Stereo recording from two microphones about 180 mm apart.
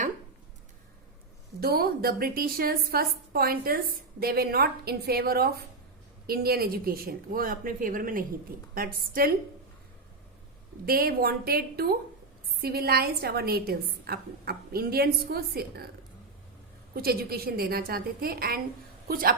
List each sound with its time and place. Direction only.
1.6 s a woman's voice: 55° right (ahead or behind)
10.8 s a woman's voice: 55° right (ahead or behind)
16.9 s a woman's voice: 60° right (ahead or behind)